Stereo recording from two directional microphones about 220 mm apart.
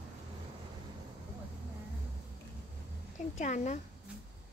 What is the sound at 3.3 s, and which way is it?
Speech, 35° left (ahead or behind).